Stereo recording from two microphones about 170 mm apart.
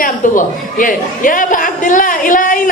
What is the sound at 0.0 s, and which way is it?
A woman's voice, 50° left (ahead or behind).